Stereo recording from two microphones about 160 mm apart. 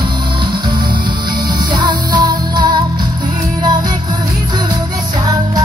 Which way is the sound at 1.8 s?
30° right (ahead or behind).